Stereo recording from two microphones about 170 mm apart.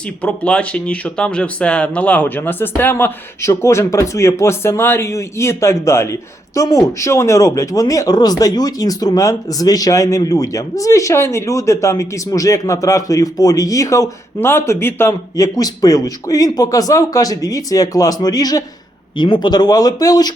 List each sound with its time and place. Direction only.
0.2 s speech: 5° left (ahead or behind); by 20.3 s 25° left (ahead or behind)